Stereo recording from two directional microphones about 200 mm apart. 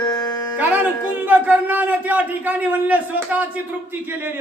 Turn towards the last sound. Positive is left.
turn(degrees=-5)  # may be behind; listen again after turning